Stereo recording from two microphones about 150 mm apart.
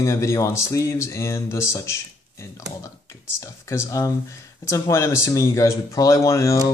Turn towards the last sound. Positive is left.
turn(degrees=20)  # may be behind; listen again after turning